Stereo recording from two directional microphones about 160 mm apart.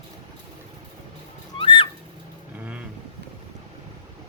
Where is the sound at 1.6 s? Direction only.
30° left (ahead or behind).